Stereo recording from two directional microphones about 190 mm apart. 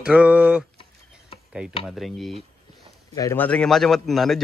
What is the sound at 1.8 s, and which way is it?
Speech, centre (ahead or behind).